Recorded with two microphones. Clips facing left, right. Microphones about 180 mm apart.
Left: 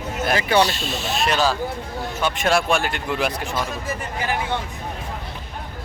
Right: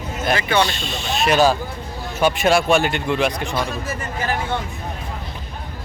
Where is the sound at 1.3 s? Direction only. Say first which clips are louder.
Right 8 dB; 15° right (ahead or behind); by 3.5 s 5° left (ahead or behind).